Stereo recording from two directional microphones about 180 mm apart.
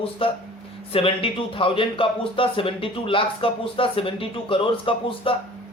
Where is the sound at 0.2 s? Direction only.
30° left (ahead or behind).